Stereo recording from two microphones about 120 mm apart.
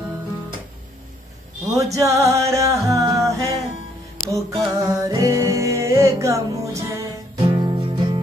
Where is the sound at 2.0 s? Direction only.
25° right (ahead or behind).